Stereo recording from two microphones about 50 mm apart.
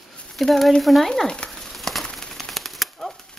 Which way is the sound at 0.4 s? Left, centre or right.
Centre.